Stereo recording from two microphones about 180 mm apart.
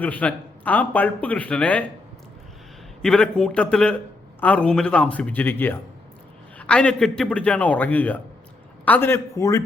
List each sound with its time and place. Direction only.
0.0 s a man's voice: 10° left (ahead or behind)
3.0 s a man's voice: 5° left (ahead or behind)